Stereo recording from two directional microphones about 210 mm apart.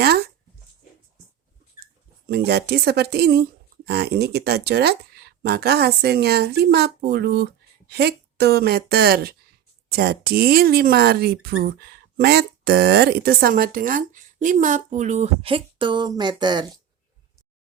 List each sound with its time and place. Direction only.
2.2 s speech: 50° right (ahead or behind); by 16.6 s 20° right (ahead or behind)